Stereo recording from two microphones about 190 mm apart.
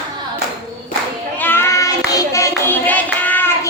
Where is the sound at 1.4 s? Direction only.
10° left (ahead or behind).